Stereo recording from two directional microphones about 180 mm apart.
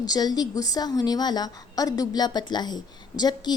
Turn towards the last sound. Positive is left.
turn(degrees=20)  # may be behind; listen again after turning